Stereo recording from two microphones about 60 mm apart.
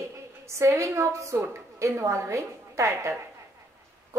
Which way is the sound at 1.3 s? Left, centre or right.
Right.